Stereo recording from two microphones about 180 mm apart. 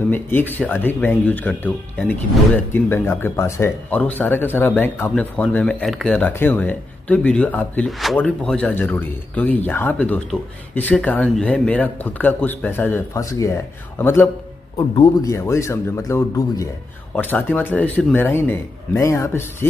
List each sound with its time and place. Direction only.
0.1 s speech: 10° left (ahead or behind)